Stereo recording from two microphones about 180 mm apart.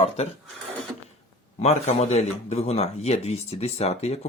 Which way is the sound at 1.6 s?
40° left (ahead or behind).